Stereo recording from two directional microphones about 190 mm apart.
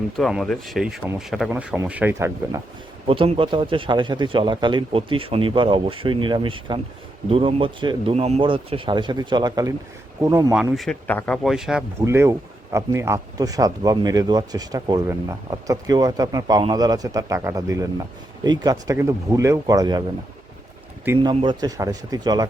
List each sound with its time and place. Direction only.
0.2 s speech: centre (ahead or behind); by 2.6 s 15° right (ahead or behind)
3.1 s speech: 30° right (ahead or behind)
10.5 s speech: 5° right (ahead or behind)
11.9 s speech: 15° right (ahead or behind)
21.2 s speech: 25° right (ahead or behind)